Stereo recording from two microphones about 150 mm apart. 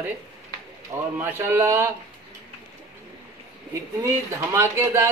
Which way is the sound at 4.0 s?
20° right (ahead or behind).